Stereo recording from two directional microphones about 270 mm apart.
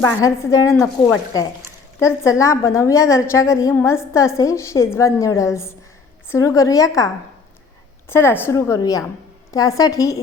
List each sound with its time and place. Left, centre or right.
0.0 s a woman's voice: centre
8.1 s a woman's voice: centre